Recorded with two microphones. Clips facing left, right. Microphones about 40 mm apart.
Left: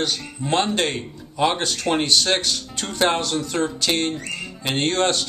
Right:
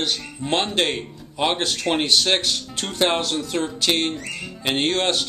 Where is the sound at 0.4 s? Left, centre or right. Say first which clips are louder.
Left 1 dB; centre.